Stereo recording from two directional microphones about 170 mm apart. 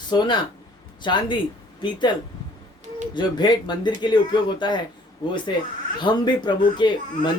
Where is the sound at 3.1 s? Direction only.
25° left (ahead or behind).